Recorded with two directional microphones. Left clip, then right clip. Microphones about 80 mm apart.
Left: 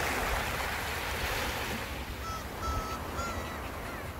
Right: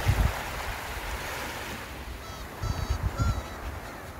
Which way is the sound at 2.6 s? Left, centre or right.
Right.